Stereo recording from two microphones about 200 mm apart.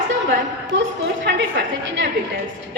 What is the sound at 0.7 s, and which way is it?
A woman's voice, 65° right (ahead or behind).